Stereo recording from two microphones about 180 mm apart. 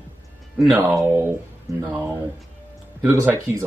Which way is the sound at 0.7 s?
15° right (ahead or behind).